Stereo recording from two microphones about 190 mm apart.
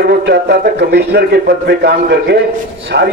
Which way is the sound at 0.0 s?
60° right (ahead or behind).